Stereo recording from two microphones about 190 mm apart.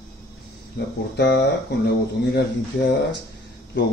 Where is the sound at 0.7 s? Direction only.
60° left (ahead or behind).